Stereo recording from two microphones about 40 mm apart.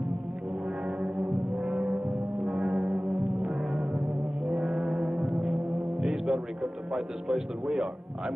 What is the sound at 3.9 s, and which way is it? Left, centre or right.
Music, centre.